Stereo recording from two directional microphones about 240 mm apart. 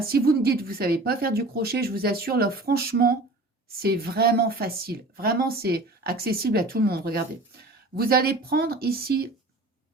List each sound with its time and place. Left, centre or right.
0.0 s a woman's voice: right